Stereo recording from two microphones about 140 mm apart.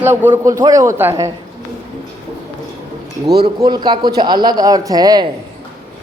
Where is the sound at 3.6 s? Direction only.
30° right (ahead or behind).